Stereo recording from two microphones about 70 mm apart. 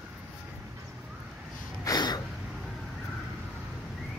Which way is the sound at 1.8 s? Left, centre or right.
Left.